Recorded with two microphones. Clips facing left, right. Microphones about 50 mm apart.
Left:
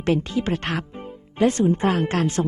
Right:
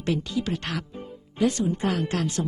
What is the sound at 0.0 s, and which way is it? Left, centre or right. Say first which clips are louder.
Speech: left 5 dB; left.